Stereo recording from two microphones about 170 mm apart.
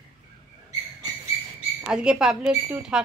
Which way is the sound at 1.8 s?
5° right (ahead or behind).